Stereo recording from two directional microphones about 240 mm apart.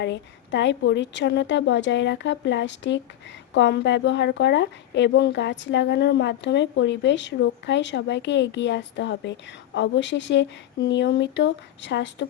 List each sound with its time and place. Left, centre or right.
0.0 s a woman's voice: left